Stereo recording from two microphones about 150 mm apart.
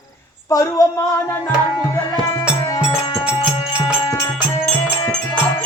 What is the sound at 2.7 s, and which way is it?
Music, 25° left (ahead or behind).